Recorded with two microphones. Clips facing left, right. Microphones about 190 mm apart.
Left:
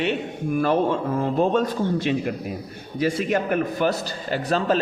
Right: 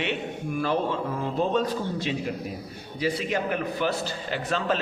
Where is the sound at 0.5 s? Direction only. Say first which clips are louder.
Left 6 dB; 50° left (ahead or behind).